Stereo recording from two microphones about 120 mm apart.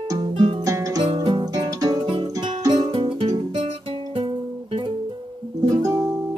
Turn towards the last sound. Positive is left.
turn(degrees=-30)  # may be behind; listen again after turning